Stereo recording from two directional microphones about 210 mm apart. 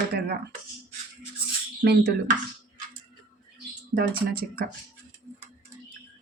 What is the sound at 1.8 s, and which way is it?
Speech, 50° right (ahead or behind).